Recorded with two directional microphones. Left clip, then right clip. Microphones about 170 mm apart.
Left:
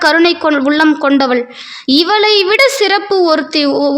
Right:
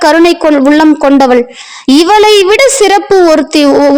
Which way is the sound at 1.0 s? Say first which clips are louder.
Right 6 dB; 40° right (ahead or behind).